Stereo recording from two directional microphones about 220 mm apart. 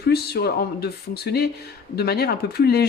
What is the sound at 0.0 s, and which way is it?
Speech, 45° left (ahead or behind).